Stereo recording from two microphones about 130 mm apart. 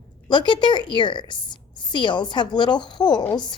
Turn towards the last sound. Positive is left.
turn(degrees=35)  # may be behind; listen again after turning